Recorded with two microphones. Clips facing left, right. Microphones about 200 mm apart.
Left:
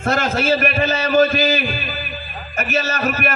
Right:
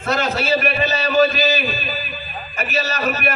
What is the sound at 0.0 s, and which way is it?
A man's voice, 50° left (ahead or behind).